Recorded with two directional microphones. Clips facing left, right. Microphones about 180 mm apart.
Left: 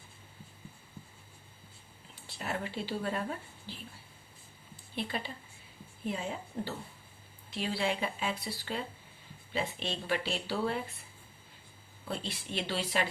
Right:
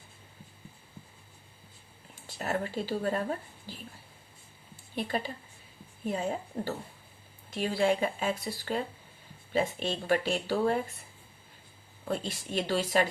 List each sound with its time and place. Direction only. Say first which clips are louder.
2.1 s speech: right 5 dB; 45° right (ahead or behind)
4.9 s speech: right 4 dB; 45° right (ahead or behind)
12.0 s speech: right 5 dB; 45° right (ahead or behind)